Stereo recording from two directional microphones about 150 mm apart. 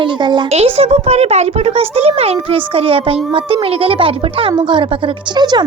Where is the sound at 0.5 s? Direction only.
45° right (ahead or behind).